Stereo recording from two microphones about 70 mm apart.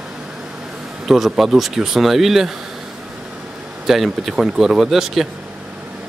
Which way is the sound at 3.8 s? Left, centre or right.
Centre.